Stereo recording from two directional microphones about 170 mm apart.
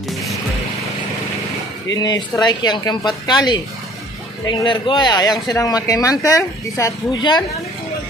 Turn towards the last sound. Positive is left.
turn(degrees=25)  # may be behind; listen again after turning